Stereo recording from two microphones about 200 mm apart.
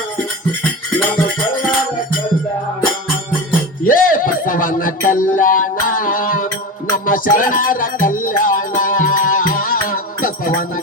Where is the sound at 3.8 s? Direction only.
45° left (ahead or behind).